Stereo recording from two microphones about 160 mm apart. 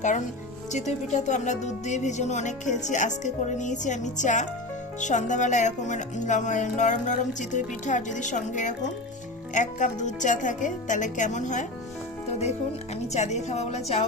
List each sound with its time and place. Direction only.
0.7 s speech: 45° left (ahead or behind)